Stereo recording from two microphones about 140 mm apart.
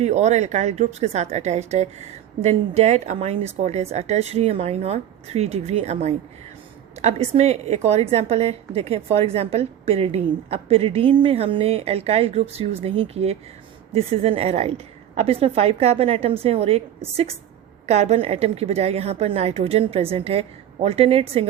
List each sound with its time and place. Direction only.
0.0 s a woman's voice: 55° right (ahead or behind)
17.8 s a woman's voice: 50° right (ahead or behind)